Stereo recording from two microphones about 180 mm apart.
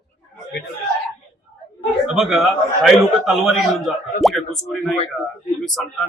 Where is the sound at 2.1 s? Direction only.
Centre (ahead or behind).